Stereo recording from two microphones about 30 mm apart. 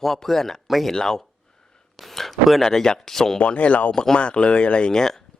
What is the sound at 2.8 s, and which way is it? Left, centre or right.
Speech, left.